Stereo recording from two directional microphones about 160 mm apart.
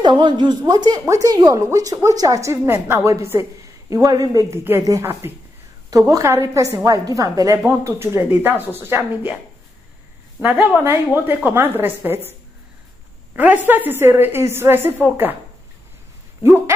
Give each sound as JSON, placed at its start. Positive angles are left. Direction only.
{"t": 0.0, "sound": "a woman's voice", "side_deg": -30}
{"t": 10.8, "sound": "a woman's voice", "side_deg": -15}